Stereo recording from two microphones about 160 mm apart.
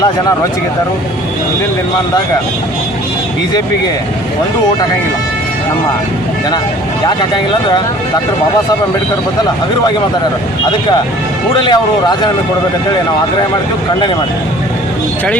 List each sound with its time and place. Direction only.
11.5 s speech: 30° left (ahead or behind)